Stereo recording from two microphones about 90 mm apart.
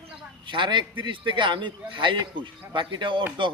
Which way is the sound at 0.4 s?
60° right (ahead or behind).